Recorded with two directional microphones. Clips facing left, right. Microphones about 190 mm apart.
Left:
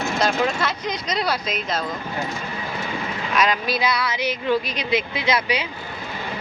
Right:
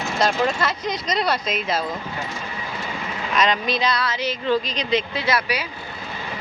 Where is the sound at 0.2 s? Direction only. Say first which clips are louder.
Right 2 dB; centre (ahead or behind).